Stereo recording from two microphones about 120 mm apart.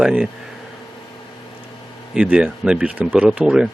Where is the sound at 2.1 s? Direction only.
10° right (ahead or behind).